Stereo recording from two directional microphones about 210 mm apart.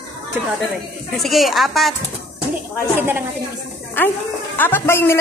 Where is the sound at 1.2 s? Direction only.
Centre (ahead or behind).